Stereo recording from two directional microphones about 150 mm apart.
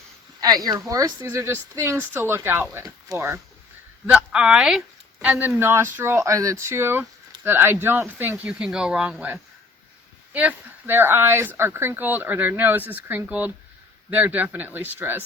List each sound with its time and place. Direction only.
0.3 s a woman's voice: 25° right (ahead or behind)